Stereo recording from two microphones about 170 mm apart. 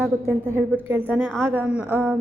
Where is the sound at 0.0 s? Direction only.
10° right (ahead or behind).